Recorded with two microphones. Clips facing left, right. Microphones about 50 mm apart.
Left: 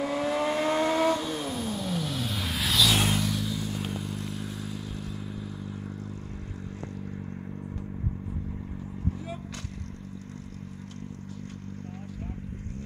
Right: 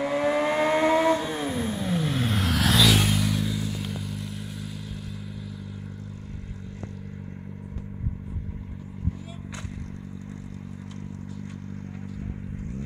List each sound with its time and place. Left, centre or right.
0.0 s vehicle: right
2.3 s vehicle: right
2.9 s vehicle: centre
3.3 s vehicle: centre
3.8 s motorcycle: left